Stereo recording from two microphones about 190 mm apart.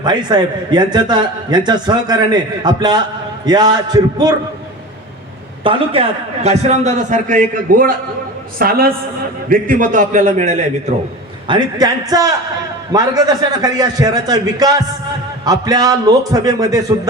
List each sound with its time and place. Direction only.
0.0 s a man's voice: 25° right (ahead or behind)
5.6 s a man's voice: 30° right (ahead or behind)
11.4 s a man's voice: 20° right (ahead or behind)